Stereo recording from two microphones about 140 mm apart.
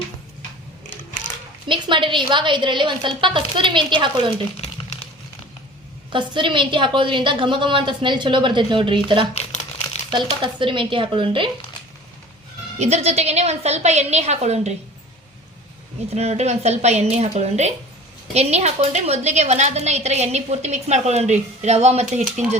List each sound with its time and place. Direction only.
1.6 s a woman's voice: 35° right (ahead or behind)
6.1 s a woman's voice: 35° right (ahead or behind)
9.3 s crumpling: 45° left (ahead or behind)
10.1 s a woman's voice: 35° right (ahead or behind)
12.8 s a woman's voice: 50° right (ahead or behind)
16.1 s a woman's voice: 50° right (ahead or behind)